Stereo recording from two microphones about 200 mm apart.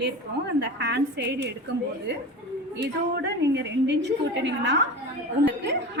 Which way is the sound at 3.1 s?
55° right (ahead or behind).